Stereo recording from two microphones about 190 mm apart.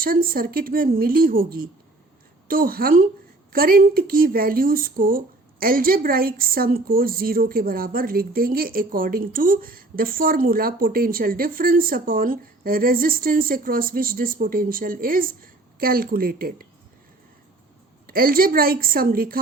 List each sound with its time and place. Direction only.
0.0 s speech: 50° right (ahead or behind)
18.0 s speech: 50° right (ahead or behind)